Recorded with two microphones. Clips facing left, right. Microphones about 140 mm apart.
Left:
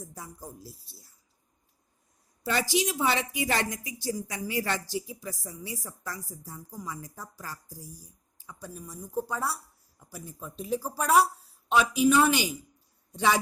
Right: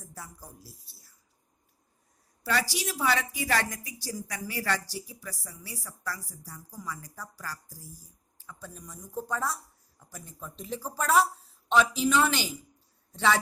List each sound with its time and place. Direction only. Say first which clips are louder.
0.1 s a woman's voice: left 3 dB; 20° left (ahead or behind)
2.4 s a woman's voice: left 3 dB; 20° left (ahead or behind)